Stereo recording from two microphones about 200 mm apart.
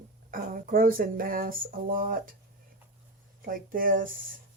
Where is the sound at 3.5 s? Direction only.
45° right (ahead or behind).